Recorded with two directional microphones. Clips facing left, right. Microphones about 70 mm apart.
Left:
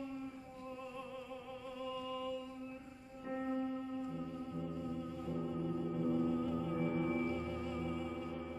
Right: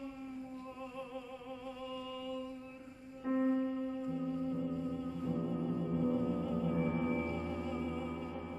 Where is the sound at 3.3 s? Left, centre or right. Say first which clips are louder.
Right 8 dB; centre.